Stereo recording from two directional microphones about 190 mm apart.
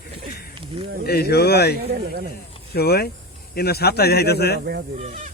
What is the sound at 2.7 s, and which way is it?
Speech, 55° left (ahead or behind).